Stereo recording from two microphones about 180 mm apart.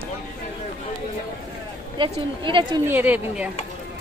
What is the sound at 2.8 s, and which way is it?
Speech, 10° right (ahead or behind).